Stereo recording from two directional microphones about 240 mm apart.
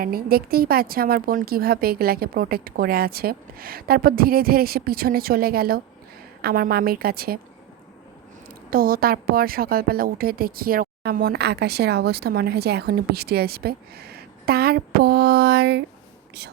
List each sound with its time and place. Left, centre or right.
0.0 s a woman's voice: right
8.7 s a woman's voice: right